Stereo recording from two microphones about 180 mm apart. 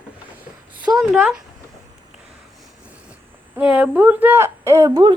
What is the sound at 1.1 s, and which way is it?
Speech, centre (ahead or behind).